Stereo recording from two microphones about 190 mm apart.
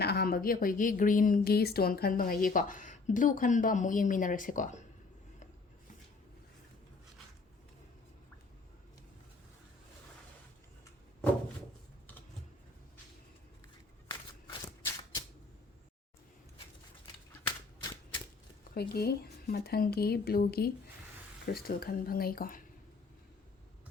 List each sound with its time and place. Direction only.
0.0 s a woman's voice: 55° left (ahead or behind)
14.1 s shuffling cards: 15° left (ahead or behind)
17.4 s a sound: 20° left (ahead or behind)
18.7 s a woman's voice: 55° left (ahead or behind)